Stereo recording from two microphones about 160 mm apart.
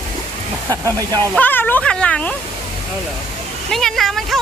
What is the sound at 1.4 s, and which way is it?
Speech, 10° left (ahead or behind).